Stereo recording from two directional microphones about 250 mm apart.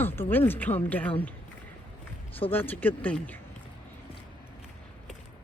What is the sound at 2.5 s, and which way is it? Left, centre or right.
Speech, centre.